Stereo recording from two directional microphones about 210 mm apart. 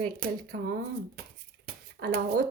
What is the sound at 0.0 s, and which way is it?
A woman's voice, 45° right (ahead or behind).